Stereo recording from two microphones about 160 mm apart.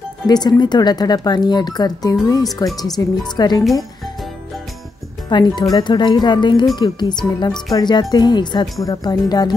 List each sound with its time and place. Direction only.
0.3 s speech: 25° left (ahead or behind)
5.3 s speech: 25° left (ahead or behind)